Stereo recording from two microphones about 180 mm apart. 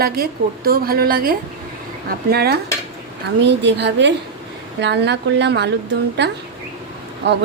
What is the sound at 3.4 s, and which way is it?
Speech, 75° right (ahead or behind).